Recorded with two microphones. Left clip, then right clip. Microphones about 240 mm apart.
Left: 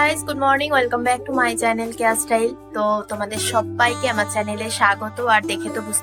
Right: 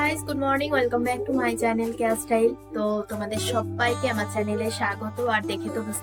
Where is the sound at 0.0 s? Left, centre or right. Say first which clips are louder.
Left 7 dB; centre.